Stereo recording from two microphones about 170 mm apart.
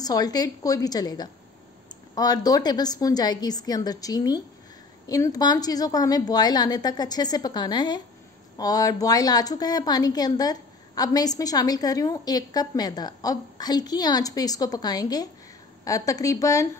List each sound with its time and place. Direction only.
0.0 s a woman's voice: 20° left (ahead or behind)